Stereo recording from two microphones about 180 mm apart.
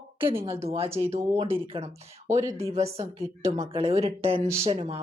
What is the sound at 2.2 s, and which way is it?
Speech, 15° right (ahead or behind).